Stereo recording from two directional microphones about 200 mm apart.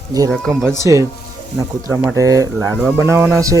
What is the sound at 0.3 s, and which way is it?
Speech, centre (ahead or behind).